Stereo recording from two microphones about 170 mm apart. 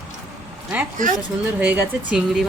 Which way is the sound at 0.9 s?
50° right (ahead or behind).